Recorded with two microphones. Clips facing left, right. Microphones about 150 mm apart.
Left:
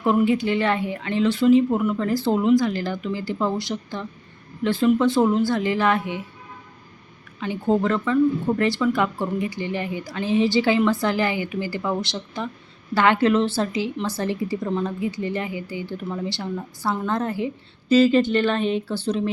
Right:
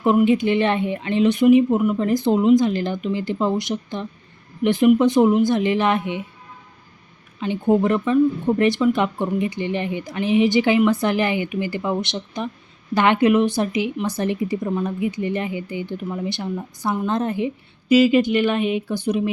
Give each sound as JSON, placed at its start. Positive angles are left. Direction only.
{"t": 0.0, "sound": "speech", "side_deg": -20}
{"t": 7.3, "sound": "a woman's voice", "side_deg": -20}